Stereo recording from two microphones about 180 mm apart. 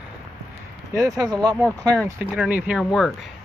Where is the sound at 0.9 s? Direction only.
20° right (ahead or behind); by 3.1 s centre (ahead or behind).